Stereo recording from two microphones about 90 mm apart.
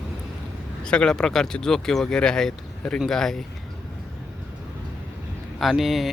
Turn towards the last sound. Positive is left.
turn(degrees=0)  # may be behind; listen again after turning